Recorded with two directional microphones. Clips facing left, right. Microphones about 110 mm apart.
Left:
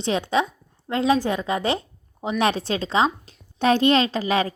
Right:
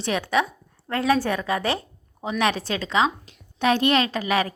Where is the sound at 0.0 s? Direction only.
25° left (ahead or behind).